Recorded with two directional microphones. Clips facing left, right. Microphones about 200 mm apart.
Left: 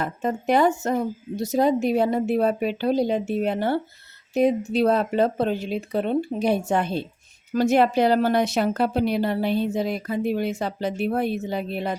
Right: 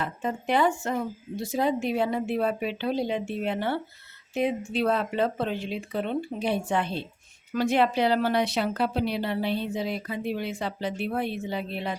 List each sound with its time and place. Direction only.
0.0 s a woman's voice: 40° left (ahead or behind)